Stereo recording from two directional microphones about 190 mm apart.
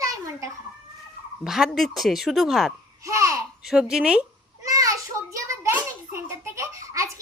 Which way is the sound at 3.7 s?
5° right (ahead or behind).